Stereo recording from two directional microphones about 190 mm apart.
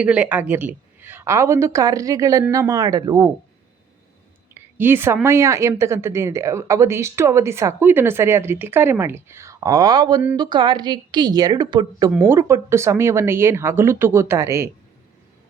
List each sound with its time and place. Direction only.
0.0 s speech: 5° right (ahead or behind)
4.5 s a woman's voice: 10° right (ahead or behind)